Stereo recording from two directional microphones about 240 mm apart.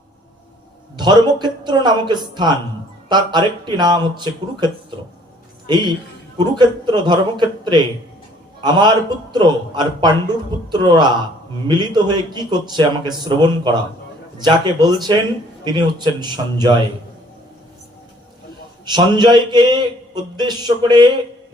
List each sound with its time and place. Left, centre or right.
0.9 s a man's voice: centre
18.9 s a man's voice: centre